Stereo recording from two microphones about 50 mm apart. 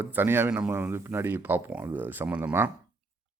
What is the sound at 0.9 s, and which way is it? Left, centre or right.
Speech, right.